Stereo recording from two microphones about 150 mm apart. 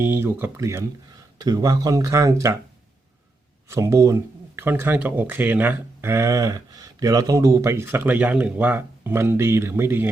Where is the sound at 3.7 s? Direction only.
20° right (ahead or behind).